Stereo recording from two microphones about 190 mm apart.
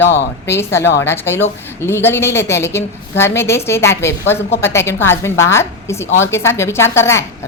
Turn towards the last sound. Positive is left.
turn(degrees=15)  # may be behind; listen again after turning